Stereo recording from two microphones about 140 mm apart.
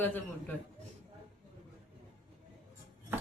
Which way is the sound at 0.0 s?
15° left (ahead or behind).